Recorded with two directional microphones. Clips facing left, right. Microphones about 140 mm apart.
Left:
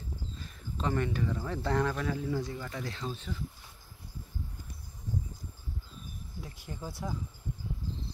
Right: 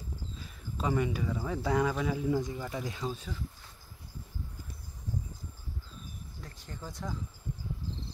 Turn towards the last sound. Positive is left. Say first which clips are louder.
# left 2 dB
turn(degrees=10)  # may be behind; listen again after turning